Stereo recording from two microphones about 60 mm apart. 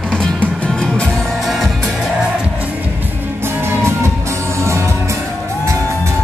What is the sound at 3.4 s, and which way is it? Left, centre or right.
Music, right.